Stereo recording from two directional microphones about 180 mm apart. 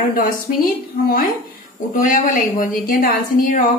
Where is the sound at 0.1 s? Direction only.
55° left (ahead or behind).